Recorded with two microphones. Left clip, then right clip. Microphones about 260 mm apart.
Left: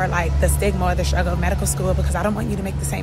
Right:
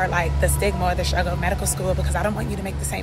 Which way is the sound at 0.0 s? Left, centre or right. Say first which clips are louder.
Even; centre.